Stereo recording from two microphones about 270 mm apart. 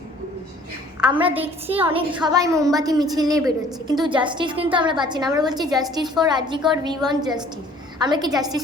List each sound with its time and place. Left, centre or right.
1.1 s a woman's voice: centre